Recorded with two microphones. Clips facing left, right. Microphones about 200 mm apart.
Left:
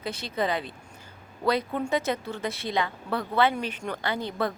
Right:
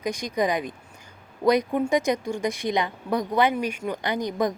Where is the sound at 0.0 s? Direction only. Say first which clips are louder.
Right 4 dB; 15° right (ahead or behind).